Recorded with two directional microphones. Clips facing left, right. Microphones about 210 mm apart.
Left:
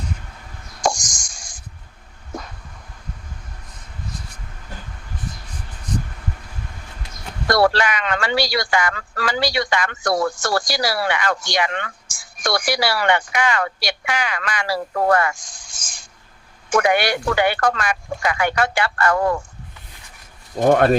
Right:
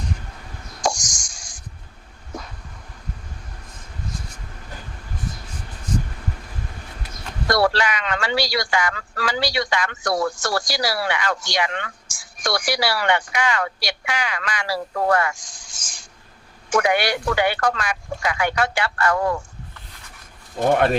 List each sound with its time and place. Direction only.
0.8 s plop: 50° left (ahead or behind)
7.5 s speech: 55° left (ahead or behind)
20.6 s speech: 45° left (ahead or behind)